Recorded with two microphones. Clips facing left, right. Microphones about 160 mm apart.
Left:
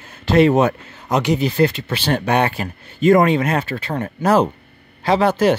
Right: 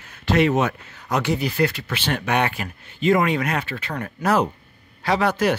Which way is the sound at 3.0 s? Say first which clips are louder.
Left 6 dB; 45° left (ahead or behind).